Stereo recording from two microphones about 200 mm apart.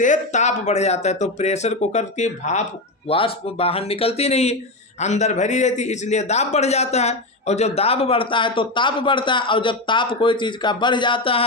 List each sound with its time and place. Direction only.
0.0 s a man's voice: 35° left (ahead or behind)